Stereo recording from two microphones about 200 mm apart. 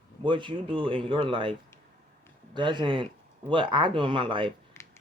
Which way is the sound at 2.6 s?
25° right (ahead or behind).